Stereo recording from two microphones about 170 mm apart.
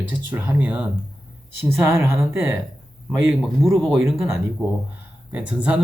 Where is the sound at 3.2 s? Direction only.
Centre (ahead or behind).